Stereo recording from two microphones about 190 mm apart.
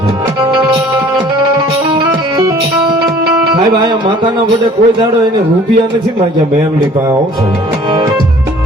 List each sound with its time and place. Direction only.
4.4 s a man's voice: 25° right (ahead or behind)